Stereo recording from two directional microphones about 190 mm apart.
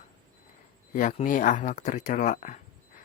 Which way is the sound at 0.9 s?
45° left (ahead or behind).